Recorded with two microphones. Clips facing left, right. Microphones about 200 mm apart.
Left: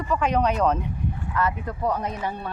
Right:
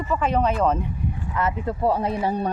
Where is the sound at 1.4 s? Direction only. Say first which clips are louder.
Right 2 dB; 25° right (ahead or behind).